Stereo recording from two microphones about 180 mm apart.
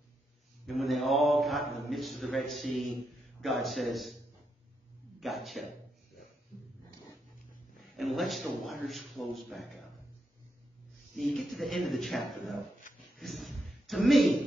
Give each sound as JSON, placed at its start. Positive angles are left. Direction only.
{"t": 0.7, "sound": "speech", "side_deg": 0}
{"t": 5.2, "sound": "speech", "side_deg": 0}
{"t": 7.9, "sound": "speech", "side_deg": 0}
{"t": 11.1, "sound": "speech", "side_deg": 0}